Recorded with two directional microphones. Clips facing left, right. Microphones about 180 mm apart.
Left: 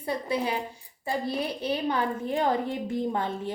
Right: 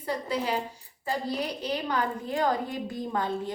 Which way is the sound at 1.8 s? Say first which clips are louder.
Left 2 dB; 25° left (ahead or behind).